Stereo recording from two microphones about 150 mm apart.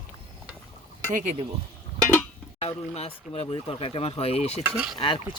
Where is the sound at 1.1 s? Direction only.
55° right (ahead or behind).